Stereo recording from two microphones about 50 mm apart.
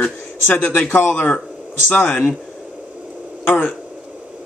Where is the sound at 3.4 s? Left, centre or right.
Left.